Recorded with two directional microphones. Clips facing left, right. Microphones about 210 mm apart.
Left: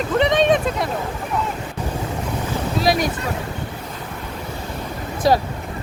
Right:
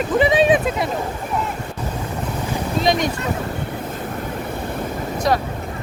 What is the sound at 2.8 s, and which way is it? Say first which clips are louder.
Boat: even; 5° left (ahead or behind).